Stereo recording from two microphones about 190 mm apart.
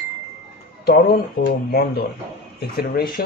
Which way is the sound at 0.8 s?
55° left (ahead or behind).